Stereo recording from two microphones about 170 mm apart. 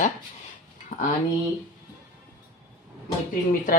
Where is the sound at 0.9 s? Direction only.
45° left (ahead or behind).